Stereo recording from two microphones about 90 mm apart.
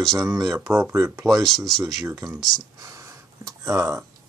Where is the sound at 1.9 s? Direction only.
40° right (ahead or behind).